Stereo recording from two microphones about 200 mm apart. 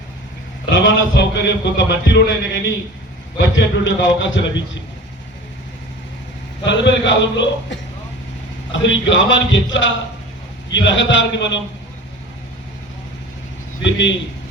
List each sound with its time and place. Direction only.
0.6 s a man's voice: 65° left (ahead or behind)
6.7 s a man's voice: 65° left (ahead or behind)